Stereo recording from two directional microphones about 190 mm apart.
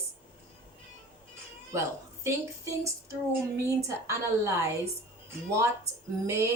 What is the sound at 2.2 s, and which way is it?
Speech, 15° right (ahead or behind).